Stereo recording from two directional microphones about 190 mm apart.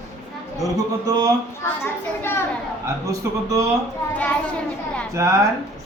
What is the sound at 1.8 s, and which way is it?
Speech, 10° left (ahead or behind).